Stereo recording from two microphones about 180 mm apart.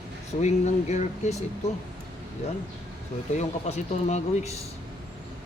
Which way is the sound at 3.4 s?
35° left (ahead or behind).